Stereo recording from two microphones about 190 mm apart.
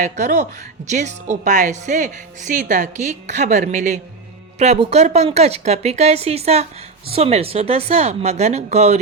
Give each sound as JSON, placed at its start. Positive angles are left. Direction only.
{"t": 0.0, "sound": "speech", "side_deg": -40}